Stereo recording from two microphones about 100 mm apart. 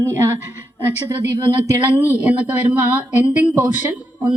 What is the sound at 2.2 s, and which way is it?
Speech, 15° right (ahead or behind).